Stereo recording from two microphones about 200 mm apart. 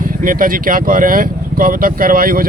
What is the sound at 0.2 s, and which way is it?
Speech, 45° right (ahead or behind).